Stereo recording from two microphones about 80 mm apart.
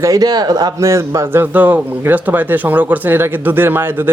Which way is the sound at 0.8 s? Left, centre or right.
Right.